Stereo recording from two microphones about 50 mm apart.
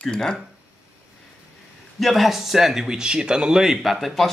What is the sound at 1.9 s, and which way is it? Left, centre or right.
Speech, centre.